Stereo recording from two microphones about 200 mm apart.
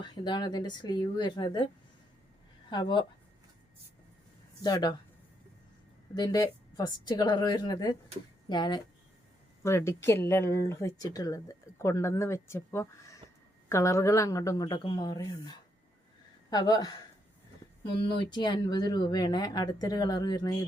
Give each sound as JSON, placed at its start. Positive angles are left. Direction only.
{"t": 0.0, "sound": "speech", "side_deg": 20}
{"t": 2.6, "sound": "speech", "side_deg": 20}
{"t": 4.6, "sound": "speech", "side_deg": 20}
{"t": 6.1, "sound": "speech", "side_deg": 20}